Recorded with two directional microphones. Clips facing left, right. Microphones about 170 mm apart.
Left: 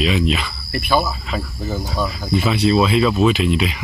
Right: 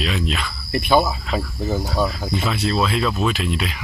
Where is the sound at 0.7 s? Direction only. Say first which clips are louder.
Right 2 dB; 20° right (ahead or behind).